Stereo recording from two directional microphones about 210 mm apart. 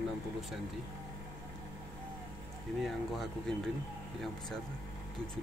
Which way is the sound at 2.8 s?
Centre (ahead or behind).